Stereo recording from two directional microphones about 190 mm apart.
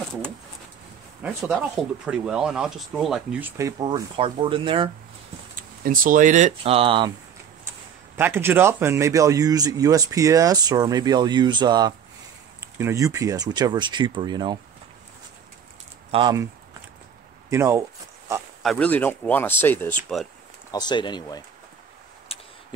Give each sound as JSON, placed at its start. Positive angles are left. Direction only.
{"t": 1.2, "sound": "speech", "side_deg": -5}
{"t": 5.6, "sound": "speech", "side_deg": -45}
{"t": 8.2, "sound": "speech", "side_deg": -10}
{"t": 16.1, "sound": "speech", "side_deg": -25}
{"t": 17.5, "sound": "speech", "side_deg": -15}
{"t": 18.6, "sound": "speech", "side_deg": 5}
{"t": 20.7, "sound": "speech", "side_deg": 25}
{"t": 22.3, "sound": "a sound", "side_deg": 30}